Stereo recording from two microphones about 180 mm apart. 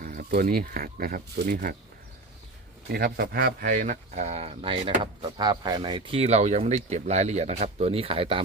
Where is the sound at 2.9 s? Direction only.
55° right (ahead or behind).